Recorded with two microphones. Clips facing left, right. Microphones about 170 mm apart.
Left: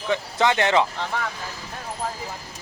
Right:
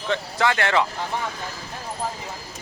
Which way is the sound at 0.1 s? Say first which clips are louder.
Left 1 dB; 20° left (ahead or behind).